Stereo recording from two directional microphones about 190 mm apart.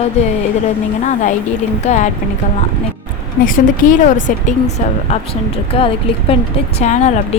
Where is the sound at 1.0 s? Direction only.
40° left (ahead or behind).